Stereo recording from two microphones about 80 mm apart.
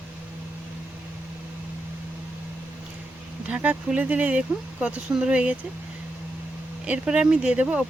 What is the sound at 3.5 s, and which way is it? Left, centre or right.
Speech, centre.